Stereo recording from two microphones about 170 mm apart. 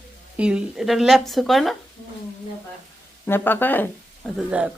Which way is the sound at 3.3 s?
10° left (ahead or behind).